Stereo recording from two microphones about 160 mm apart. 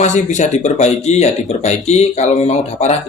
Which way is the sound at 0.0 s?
50° left (ahead or behind).